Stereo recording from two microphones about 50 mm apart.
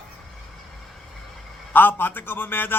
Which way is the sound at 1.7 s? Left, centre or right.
Left.